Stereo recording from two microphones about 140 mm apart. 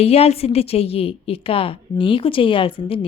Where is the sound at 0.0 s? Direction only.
45° left (ahead or behind).